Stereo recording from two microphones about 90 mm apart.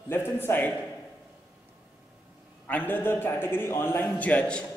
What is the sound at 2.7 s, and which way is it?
A man's voice, 20° left (ahead or behind).